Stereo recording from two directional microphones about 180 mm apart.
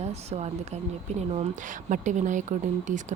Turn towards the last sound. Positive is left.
turn(degrees=-45)  # may be behind; listen again after turning